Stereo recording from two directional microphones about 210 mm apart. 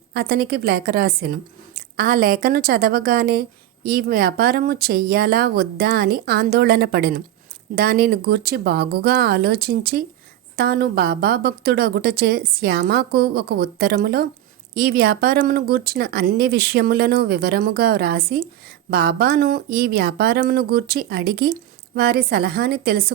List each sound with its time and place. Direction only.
0.1 s a woman's voice: 50° right (ahead or behind)